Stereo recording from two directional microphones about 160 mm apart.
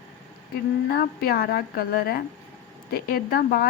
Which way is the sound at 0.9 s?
70° left (ahead or behind).